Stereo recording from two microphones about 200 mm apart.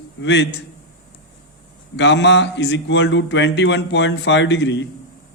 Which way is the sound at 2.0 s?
60° left (ahead or behind).